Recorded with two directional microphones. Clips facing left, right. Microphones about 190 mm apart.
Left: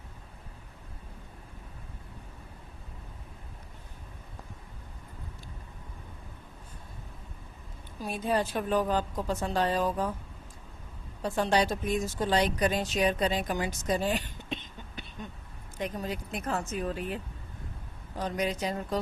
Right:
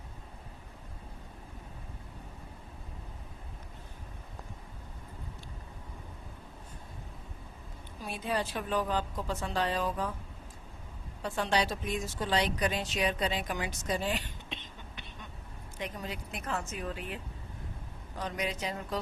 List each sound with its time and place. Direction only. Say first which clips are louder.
8.0 s speech: left 5 dB; 45° left (ahead or behind)
11.2 s speech: left 4 dB; 40° left (ahead or behind)
18.2 s speech: left 4 dB; 40° left (ahead or behind)